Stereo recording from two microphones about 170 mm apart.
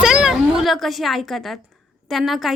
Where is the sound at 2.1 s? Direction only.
Centre (ahead or behind).